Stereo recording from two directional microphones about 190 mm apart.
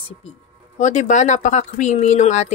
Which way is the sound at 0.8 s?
40° left (ahead or behind).